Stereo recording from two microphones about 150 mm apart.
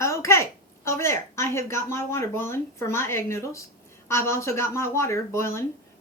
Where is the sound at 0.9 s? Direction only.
20° left (ahead or behind).